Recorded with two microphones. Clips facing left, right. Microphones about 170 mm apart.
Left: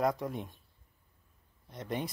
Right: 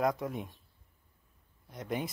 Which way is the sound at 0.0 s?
Centre (ahead or behind).